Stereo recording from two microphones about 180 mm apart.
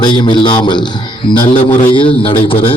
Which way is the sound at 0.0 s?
25° left (ahead or behind).